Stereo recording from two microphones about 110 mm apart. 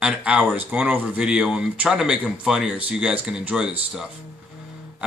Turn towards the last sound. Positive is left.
turn(degrees=-10)  # may be behind; listen again after turning